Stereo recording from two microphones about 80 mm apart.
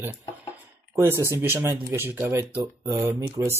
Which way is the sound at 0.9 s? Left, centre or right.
Right.